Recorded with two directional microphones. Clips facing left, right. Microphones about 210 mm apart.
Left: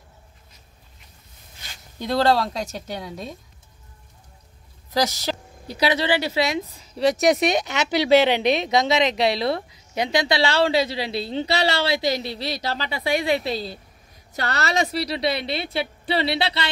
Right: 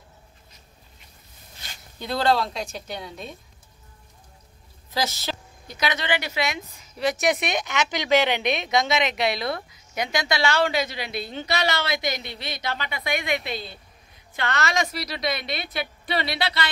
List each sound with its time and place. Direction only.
2.1 s speech: 40° left (ahead or behind)
4.9 s a woman's voice: 40° left (ahead or behind)